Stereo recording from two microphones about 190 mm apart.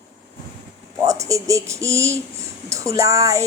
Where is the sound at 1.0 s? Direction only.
15° right (ahead or behind).